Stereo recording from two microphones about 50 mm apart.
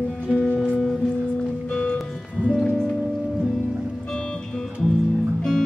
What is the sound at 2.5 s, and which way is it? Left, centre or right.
Music, centre.